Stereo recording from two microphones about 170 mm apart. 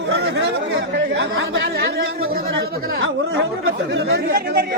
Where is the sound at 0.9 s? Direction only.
90° right.